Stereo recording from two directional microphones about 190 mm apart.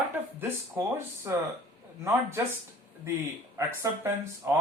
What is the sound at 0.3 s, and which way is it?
Speech, 15° right (ahead or behind).